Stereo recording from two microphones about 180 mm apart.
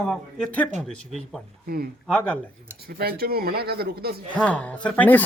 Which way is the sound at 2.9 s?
55° right (ahead or behind).